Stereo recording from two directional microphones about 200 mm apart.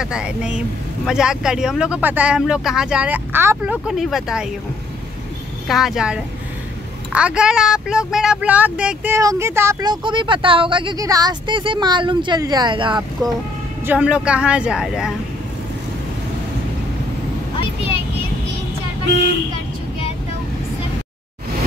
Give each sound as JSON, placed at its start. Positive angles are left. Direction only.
{"t": 0.0, "sound": "speech", "side_deg": -5}
{"t": 5.7, "sound": "speech", "side_deg": 0}
{"t": 13.8, "sound": "speech", "side_deg": -5}